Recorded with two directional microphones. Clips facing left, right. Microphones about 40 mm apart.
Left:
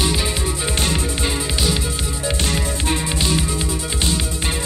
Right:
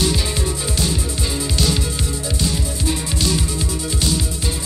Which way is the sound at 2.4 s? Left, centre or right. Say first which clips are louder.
Left 1 dB; left.